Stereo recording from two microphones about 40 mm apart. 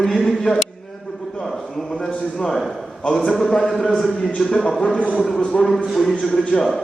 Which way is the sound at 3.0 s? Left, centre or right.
Left.